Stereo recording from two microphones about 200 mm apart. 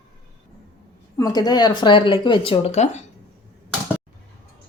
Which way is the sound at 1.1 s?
20° left (ahead or behind).